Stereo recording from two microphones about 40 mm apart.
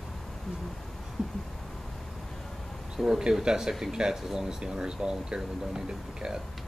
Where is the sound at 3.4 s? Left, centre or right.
Centre.